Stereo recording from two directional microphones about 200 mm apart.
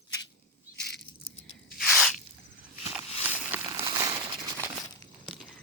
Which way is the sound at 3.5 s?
10° right (ahead or behind).